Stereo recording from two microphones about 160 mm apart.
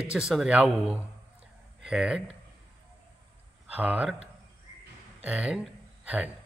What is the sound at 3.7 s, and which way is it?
Speech, 10° right (ahead or behind).